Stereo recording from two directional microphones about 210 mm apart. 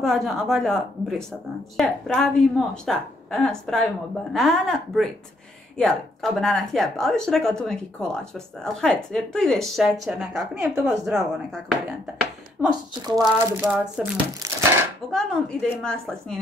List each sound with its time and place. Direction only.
0.0 s speech: centre (ahead or behind)
12.6 s speech: 20° right (ahead or behind)
14.1 s crumpling: 15° right (ahead or behind)
15.0 s speech: 5° left (ahead or behind)